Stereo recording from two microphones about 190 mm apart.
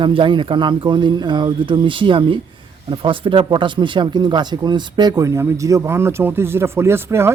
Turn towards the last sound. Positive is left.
turn(degrees=-15)  # may be behind; listen again after turning